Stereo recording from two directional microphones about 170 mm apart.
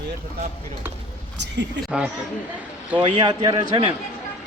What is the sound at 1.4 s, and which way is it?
Speech, 90° right.